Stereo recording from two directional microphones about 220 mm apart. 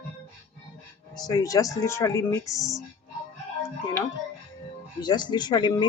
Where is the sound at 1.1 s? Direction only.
15° left (ahead or behind).